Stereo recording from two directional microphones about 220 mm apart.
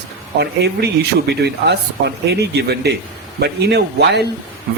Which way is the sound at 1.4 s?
50° right (ahead or behind).